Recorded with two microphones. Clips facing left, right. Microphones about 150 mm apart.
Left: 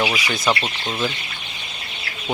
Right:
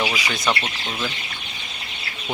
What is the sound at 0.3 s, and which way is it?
Speech, centre (ahead or behind).